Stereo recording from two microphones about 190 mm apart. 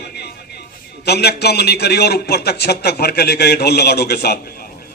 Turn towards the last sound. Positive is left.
turn(degrees=55)  # may be behind; listen again after turning